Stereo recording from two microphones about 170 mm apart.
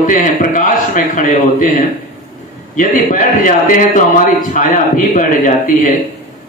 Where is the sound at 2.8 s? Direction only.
50° left (ahead or behind).